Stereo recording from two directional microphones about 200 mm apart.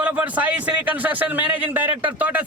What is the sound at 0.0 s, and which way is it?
A man's voice, 10° right (ahead or behind).